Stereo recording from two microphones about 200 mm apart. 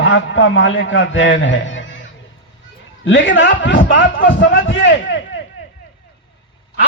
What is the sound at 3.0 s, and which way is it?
A man's voice, 70° left (ahead or behind).